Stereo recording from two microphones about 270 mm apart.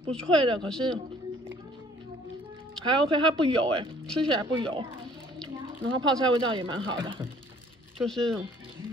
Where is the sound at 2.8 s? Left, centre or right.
Centre.